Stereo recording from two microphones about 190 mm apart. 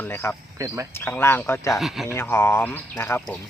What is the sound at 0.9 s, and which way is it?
Speech, 10° left (ahead or behind).